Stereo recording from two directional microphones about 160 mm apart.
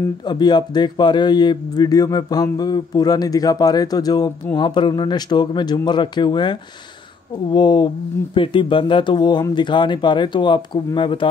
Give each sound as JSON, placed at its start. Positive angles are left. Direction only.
{"t": 0.3, "sound": "a man's voice", "side_deg": 25}